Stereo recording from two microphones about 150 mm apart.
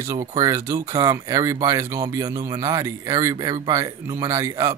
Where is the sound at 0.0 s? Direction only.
20° right (ahead or behind).